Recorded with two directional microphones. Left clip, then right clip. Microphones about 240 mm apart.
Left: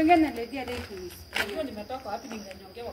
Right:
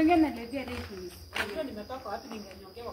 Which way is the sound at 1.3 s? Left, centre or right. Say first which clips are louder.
Left 4 dB; centre.